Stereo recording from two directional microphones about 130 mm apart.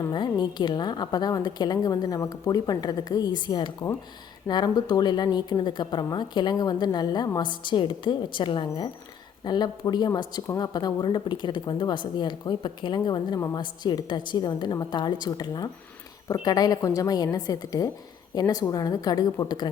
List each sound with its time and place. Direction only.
0.0 s a woman's voice: 35° left (ahead or behind)